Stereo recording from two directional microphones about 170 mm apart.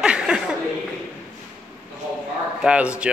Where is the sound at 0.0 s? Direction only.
5° right (ahead or behind).